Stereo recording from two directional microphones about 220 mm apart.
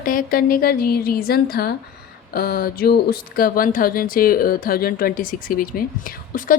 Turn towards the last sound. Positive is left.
turn(degrees=40)  # may be behind; listen again after turning